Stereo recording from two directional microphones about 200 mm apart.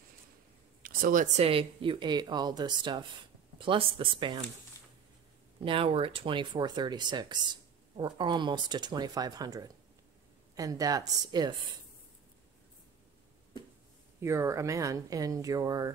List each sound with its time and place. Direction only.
0.8 s speech: 40° right (ahead or behind); by 4.5 s 25° right (ahead or behind)
5.6 s speech: 25° right (ahead or behind)
14.2 s speech: 15° right (ahead or behind)